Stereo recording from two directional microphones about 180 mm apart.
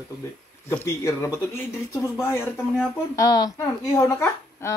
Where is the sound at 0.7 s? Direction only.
15° left (ahead or behind).